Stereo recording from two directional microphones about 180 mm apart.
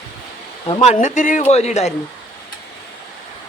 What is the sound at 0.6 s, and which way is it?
Speech, 30° left (ahead or behind).